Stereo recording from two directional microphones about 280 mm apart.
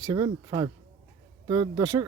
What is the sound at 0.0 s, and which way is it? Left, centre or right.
Speech, centre.